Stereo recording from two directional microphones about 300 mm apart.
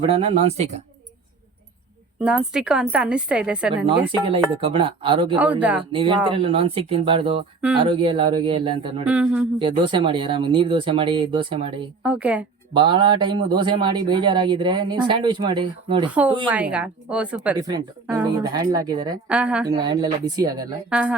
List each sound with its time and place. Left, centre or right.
0.0 s speech: centre
2.2 s a woman's voice: centre
3.8 s a woman's voice: centre
5.4 s a woman's voice: centre
5.9 s a woman's voice: centre
9.0 s a woman's voice: centre
9.6 s a woman's voice: centre
12.0 s a woman's voice: centre
12.7 s a woman's voice: centre
16.5 s a woman's voice: centre